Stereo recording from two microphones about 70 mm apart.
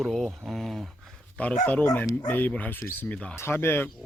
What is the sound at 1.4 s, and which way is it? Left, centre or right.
Speech, centre.